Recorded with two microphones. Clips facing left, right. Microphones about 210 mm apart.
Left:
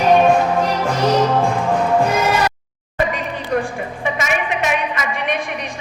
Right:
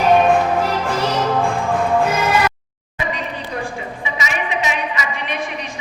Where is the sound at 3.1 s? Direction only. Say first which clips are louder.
Left 5 dB; 50° left (ahead or behind).